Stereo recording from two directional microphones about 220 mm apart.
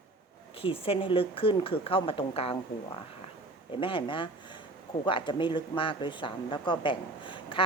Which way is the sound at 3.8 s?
25° left (ahead or behind).